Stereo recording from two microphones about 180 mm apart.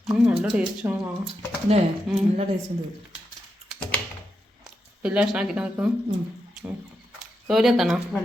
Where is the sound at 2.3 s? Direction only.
30° right (ahead or behind).